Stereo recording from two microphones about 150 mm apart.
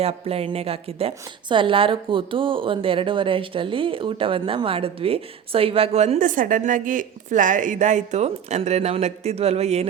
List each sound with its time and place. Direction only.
0.0 s a woman's voice: 40° right (ahead or behind)